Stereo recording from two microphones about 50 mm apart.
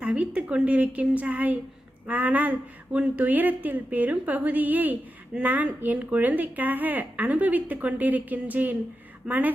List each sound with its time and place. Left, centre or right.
0.0 s a woman's voice: right
9.2 s speech: centre